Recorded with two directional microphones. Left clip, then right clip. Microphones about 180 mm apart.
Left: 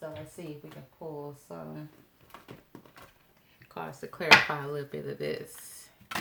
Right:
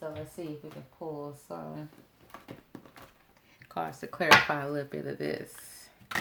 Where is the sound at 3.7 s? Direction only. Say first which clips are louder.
Right 5 dB; 50° right (ahead or behind).